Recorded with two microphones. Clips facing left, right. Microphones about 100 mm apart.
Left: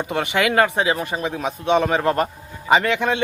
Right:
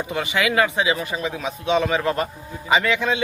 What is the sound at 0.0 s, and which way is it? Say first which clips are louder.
A man's voice: left 2 dB; 60° left (ahead or behind).